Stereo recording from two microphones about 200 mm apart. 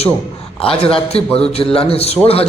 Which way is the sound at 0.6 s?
30° left (ahead or behind).